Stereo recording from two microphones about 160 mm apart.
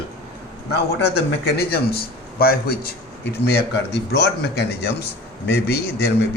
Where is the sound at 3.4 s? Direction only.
90° left.